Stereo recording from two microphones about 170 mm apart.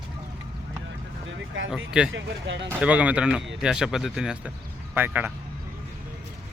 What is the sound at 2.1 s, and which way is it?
Speech, 90° right.